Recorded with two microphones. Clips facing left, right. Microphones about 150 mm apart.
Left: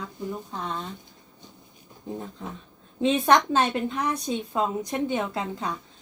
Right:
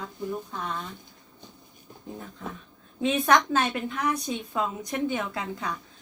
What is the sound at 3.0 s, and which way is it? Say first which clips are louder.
A woman's voice: left 2 dB; 30° left (ahead or behind).